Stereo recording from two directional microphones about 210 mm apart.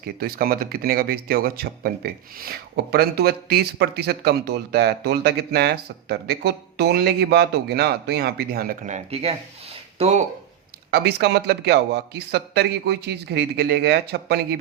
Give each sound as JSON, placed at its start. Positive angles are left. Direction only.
{"t": 0.2, "sound": "speech", "side_deg": -45}
{"t": 10.9, "sound": "speech", "side_deg": -50}